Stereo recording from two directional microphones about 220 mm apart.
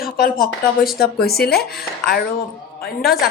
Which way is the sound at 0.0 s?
40° left (ahead or behind).